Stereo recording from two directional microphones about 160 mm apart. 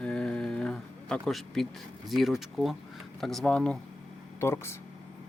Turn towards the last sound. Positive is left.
turn(degrees=15)  # may be behind; listen again after turning